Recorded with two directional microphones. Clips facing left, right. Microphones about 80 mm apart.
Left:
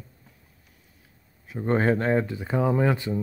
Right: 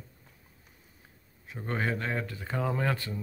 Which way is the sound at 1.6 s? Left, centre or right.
Left.